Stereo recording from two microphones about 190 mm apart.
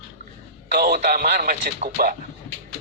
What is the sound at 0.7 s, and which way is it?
Speech, 50° right (ahead or behind).